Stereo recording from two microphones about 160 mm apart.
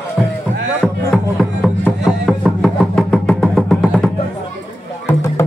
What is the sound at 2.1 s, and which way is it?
Music, centre (ahead or behind).